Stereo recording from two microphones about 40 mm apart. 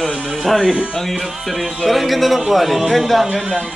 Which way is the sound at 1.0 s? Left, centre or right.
Centre.